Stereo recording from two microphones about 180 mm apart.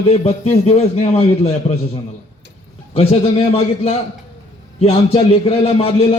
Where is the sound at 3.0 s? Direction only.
35° left (ahead or behind).